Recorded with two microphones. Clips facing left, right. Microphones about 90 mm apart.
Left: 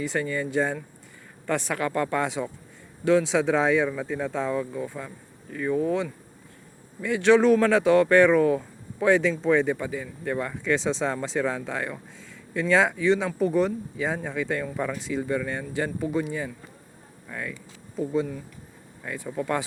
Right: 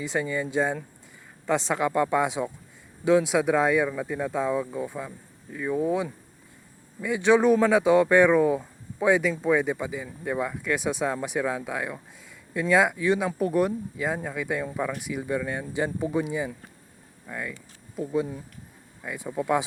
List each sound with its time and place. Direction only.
0.0 s speech: 15° right (ahead or behind)